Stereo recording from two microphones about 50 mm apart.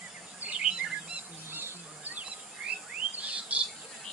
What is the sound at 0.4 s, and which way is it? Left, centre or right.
Chirp, right.